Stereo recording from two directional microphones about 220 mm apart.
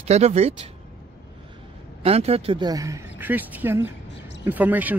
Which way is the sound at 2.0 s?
25° right (ahead or behind).